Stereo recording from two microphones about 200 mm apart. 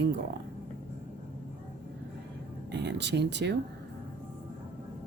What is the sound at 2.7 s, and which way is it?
Speech, 60° right (ahead or behind).